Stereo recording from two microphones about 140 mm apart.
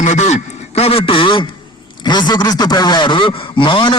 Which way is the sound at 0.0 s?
60° left (ahead or behind).